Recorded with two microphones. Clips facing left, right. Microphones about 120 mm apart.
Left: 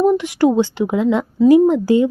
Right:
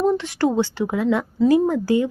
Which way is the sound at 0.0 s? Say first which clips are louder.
Left 5 dB; 15° left (ahead or behind).